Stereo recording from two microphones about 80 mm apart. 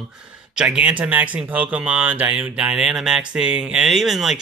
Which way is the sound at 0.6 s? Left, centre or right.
Centre.